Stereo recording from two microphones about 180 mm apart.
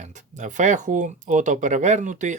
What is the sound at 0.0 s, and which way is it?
Speech, 45° right (ahead or behind).